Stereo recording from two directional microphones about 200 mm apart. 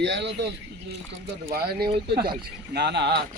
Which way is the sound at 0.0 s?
60° right (ahead or behind).